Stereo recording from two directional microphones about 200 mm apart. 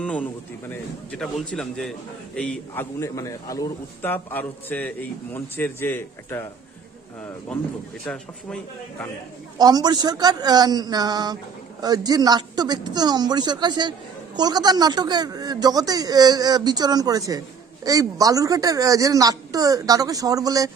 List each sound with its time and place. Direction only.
0.0 s a man's voice: 5° left (ahead or behind)
8.0 s a man's voice: 5° left (ahead or behind)
9.6 s a man's voice: 20° right (ahead or behind)